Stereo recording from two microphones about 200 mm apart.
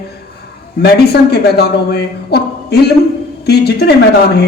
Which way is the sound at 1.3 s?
55° left (ahead or behind).